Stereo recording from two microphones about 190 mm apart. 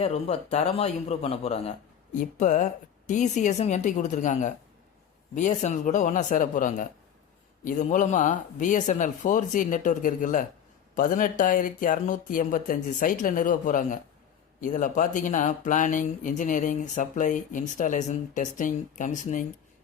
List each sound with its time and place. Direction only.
0.0 s speech: 35° left (ahead or behind)